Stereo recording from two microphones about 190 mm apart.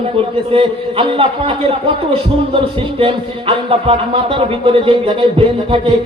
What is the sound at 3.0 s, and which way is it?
Speech, 30° right (ahead or behind).